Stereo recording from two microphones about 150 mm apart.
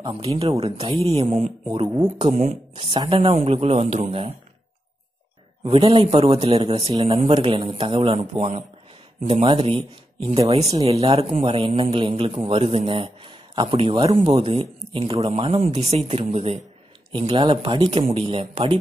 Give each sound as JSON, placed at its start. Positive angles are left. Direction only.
{"t": 0.0, "sound": "speech", "side_deg": -40}
{"t": 5.6, "sound": "speech", "side_deg": -40}
{"t": 8.3, "sound": "speech", "side_deg": -45}